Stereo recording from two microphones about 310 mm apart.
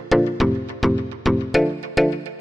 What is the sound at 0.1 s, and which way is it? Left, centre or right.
Music, centre.